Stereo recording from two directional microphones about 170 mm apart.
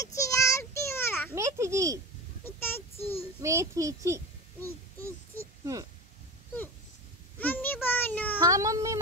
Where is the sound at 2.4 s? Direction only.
15° left (ahead or behind).